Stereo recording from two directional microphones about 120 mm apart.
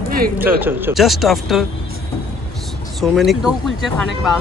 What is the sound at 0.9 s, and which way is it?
Speech, centre (ahead or behind).